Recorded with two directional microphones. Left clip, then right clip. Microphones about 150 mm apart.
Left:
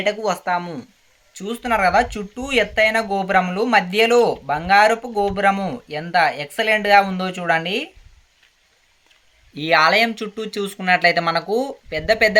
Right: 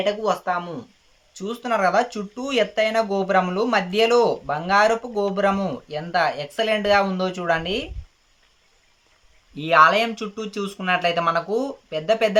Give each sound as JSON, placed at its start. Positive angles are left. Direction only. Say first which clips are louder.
{"t": 0.0, "sound": "speech", "louder": "left 1 dB", "side_deg": 25}
{"t": 9.6, "sound": "speech", "louder": "even", "side_deg": 20}